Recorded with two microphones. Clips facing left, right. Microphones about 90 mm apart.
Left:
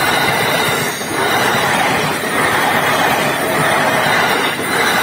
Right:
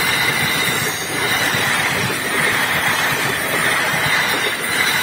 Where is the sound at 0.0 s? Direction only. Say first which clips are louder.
Left 6 dB; 70° left (ahead or behind).